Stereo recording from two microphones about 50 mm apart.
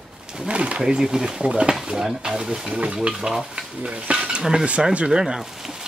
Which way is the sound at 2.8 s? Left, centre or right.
Right.